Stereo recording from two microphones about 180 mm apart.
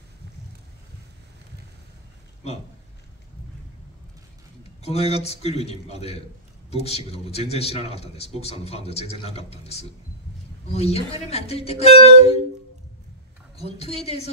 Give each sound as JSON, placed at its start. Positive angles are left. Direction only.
{"t": 4.8, "sound": "a man's voice", "side_deg": 35}
{"t": 13.6, "sound": "a man's voice", "side_deg": 35}